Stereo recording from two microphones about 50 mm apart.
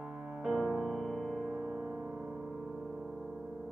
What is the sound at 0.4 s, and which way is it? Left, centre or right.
Music, centre.